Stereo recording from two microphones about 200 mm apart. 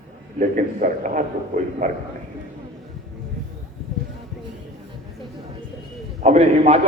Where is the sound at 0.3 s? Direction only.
40° right (ahead or behind).